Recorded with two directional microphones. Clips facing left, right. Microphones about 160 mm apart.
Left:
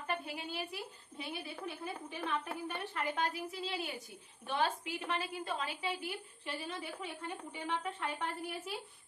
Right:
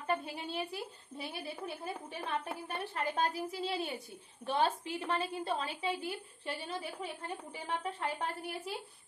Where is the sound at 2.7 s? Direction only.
35° right (ahead or behind).